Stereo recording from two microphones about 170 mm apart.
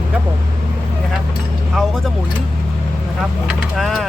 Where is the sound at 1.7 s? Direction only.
Centre (ahead or behind).